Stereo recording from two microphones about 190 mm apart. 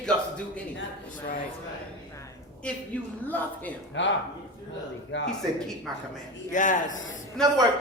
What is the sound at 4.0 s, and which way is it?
Speech, 70° left (ahead or behind).